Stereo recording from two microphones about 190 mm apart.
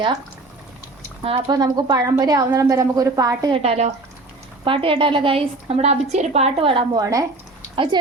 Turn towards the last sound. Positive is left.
turn(degrees=-25)  # may be behind; listen again after turning